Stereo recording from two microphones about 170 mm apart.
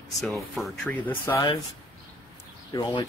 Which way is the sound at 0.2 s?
Centre (ahead or behind).